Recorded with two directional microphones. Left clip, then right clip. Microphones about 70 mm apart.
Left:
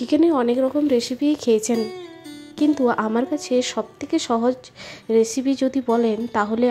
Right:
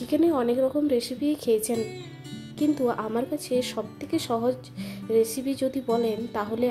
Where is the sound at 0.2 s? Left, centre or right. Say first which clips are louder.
Left 3 dB; left.